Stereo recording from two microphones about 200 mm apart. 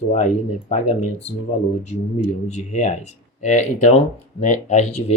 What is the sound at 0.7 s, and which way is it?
Speech, 35° left (ahead or behind).